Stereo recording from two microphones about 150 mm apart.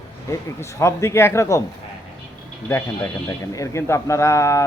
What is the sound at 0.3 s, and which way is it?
Speech, 20° left (ahead or behind).